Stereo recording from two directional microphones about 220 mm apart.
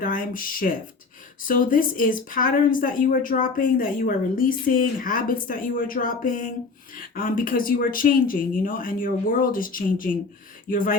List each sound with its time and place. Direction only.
0.0 s speech: 40° left (ahead or behind)